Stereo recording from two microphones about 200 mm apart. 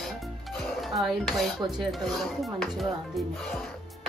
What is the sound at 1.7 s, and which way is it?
Speech, centre (ahead or behind).